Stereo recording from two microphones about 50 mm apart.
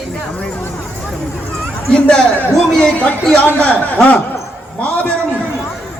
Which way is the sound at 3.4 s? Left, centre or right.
Left.